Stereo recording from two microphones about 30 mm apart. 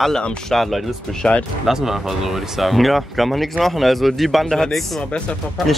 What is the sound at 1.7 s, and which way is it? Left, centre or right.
Speech, centre.